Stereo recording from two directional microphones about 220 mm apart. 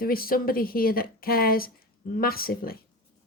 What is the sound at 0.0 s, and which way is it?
A woman's voice, 40° left (ahead or behind).